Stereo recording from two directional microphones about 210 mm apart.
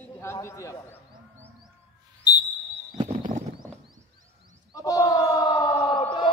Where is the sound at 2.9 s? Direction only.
25° right (ahead or behind).